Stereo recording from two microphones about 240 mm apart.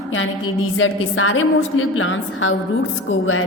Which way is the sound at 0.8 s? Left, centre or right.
Left.